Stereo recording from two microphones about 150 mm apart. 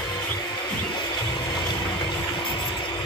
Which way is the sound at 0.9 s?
30° left (ahead or behind).